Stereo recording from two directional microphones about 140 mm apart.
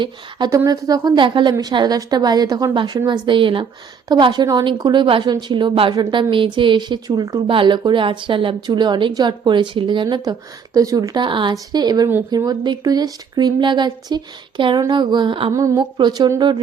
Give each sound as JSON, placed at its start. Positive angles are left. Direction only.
{"t": 0.0, "sound": "a woman's voice", "side_deg": -30}
{"t": 15.5, "sound": "a woman's voice", "side_deg": -20}